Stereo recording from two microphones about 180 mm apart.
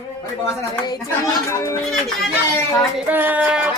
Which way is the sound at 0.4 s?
20° left (ahead or behind).